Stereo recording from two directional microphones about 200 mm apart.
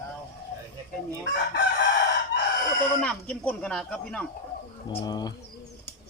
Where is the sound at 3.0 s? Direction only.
5° left (ahead or behind).